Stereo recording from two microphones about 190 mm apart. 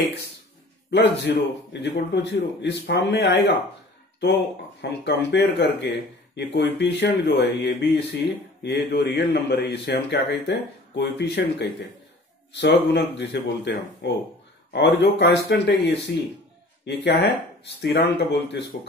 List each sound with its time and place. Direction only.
0.8 s speech: 65° left (ahead or behind)
5.0 s speech: 65° left (ahead or behind)